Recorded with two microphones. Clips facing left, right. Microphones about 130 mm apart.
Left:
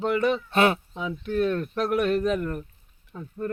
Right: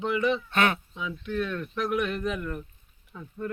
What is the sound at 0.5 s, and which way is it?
Speech, 35° left (ahead or behind).